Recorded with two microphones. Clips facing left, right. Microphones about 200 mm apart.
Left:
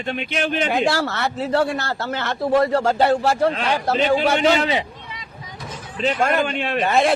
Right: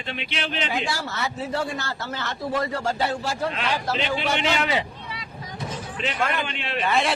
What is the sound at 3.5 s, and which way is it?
A man's voice, 50° left (ahead or behind).